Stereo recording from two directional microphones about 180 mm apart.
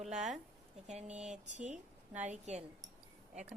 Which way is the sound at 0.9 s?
40° right (ahead or behind).